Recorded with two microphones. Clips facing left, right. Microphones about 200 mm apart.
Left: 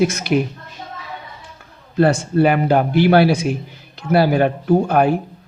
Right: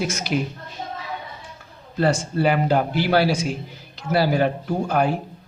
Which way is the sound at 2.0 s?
60° left (ahead or behind).